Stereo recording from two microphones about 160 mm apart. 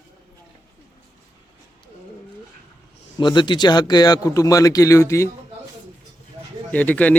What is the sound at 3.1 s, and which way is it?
A man's voice, 30° left (ahead or behind).